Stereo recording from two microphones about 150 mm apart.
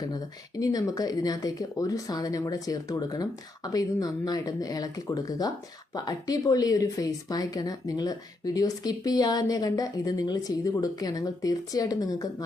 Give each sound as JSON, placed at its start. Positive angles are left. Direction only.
{"t": 0.6, "sound": "speech", "side_deg": 25}